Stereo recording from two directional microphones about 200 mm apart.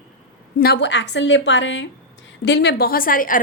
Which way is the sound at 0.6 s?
55° left (ahead or behind).